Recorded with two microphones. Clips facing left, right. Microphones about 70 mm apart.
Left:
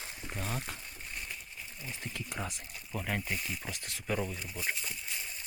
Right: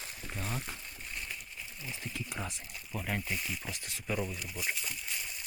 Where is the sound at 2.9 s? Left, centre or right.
Left.